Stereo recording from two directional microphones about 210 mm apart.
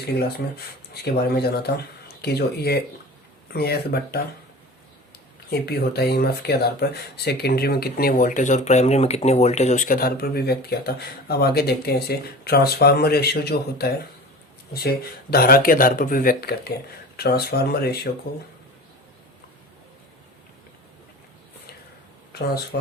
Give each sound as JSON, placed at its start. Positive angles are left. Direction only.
{"t": 1.0, "sound": "speech", "side_deg": 50}
{"t": 5.5, "sound": "speech", "side_deg": 50}
{"t": 22.3, "sound": "a sound", "side_deg": 50}